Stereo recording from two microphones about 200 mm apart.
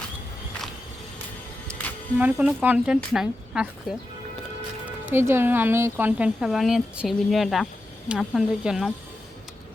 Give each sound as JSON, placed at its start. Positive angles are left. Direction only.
{"t": 2.1, "sound": "speech", "side_deg": -5}
{"t": 5.0, "sound": "speech", "side_deg": -10}